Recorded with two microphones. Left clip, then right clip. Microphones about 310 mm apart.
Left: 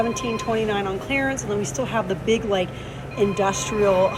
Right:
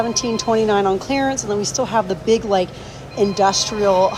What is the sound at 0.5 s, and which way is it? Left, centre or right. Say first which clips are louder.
Speech: right 8 dB; right.